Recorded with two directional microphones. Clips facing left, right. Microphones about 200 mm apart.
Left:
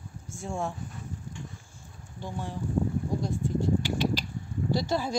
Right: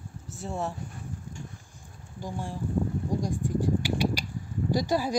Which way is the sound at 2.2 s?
10° right (ahead or behind).